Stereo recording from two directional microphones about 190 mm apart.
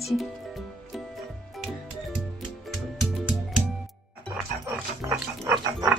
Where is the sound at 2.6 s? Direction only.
Centre (ahead or behind).